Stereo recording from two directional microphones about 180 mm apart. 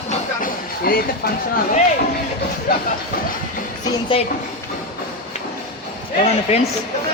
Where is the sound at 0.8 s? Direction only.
55° left (ahead or behind).